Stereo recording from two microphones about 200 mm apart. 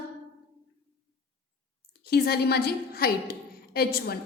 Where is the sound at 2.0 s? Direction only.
50° left (ahead or behind).